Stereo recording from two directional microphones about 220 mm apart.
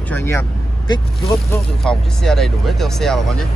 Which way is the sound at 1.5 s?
Centre (ahead or behind).